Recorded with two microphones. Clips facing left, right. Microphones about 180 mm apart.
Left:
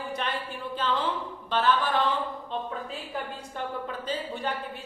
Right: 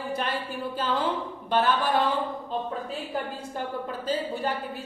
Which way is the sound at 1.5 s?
10° right (ahead or behind).